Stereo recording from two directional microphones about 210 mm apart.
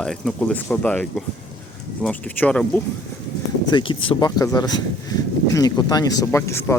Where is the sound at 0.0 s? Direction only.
5° left (ahead or behind).